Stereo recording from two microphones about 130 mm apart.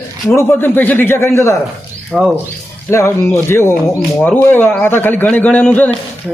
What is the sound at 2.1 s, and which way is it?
Speech, 5° right (ahead or behind).